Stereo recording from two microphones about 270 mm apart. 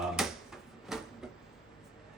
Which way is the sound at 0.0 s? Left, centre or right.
Centre.